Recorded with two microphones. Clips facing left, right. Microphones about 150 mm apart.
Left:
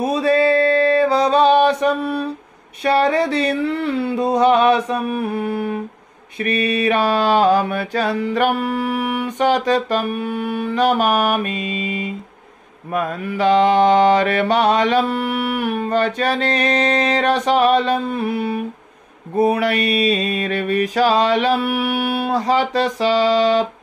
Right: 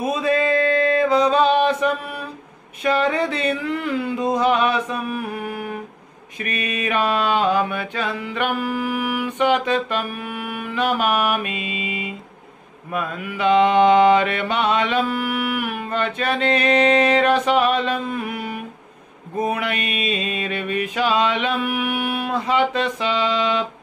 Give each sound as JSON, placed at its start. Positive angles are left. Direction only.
{"t": 0.0, "sound": "music", "side_deg": 35}
{"t": 2.8, "sound": "mantra", "side_deg": 35}